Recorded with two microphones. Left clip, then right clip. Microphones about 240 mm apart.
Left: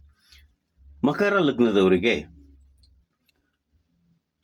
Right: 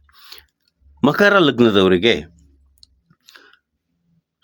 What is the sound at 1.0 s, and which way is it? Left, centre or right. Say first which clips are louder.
Speech: right 8 dB; right.